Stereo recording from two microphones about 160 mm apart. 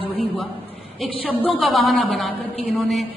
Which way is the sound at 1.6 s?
Centre (ahead or behind).